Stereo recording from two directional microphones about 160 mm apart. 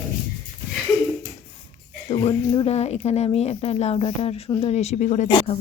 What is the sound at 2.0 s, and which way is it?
Speech, 35° left (ahead or behind).